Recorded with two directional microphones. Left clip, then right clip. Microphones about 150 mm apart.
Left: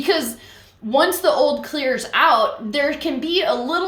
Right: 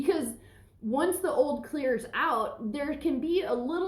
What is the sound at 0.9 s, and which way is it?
A woman's voice, 10° left (ahead or behind).